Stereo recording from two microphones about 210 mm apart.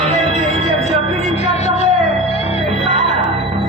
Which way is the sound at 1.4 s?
30° left (ahead or behind).